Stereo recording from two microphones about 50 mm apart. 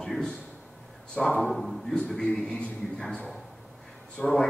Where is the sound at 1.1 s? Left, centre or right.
Left.